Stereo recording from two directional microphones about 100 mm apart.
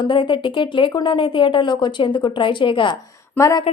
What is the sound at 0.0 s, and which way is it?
A woman's voice, 55° left (ahead or behind).